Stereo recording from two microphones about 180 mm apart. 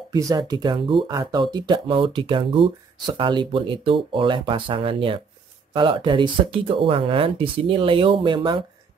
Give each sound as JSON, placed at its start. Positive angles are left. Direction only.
{"t": 0.1, "sound": "speech", "side_deg": -20}